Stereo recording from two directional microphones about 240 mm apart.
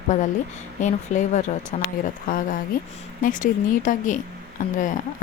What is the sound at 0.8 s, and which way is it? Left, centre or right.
Speech, left.